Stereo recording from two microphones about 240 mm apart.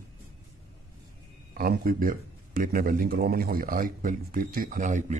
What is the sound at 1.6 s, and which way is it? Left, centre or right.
A man's voice, right.